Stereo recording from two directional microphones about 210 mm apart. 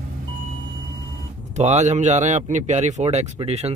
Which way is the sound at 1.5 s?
35° right (ahead or behind).